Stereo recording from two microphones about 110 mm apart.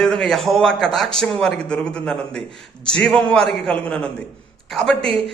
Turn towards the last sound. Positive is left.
turn(degrees=5)  # may be behind; listen again after turning